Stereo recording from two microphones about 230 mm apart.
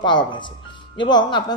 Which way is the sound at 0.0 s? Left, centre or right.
Centre.